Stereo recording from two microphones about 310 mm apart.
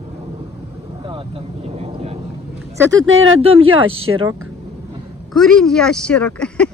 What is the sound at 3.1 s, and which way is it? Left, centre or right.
Speech, right.